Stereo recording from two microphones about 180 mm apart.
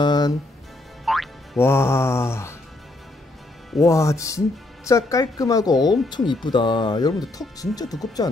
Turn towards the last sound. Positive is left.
turn(degrees=20)  # may be behind; listen again after turning